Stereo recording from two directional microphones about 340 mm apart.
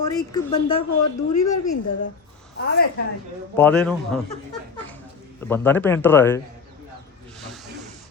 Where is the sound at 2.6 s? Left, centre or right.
Left.